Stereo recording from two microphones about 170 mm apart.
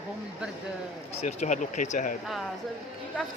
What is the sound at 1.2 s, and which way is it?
Speech, 45° left (ahead or behind).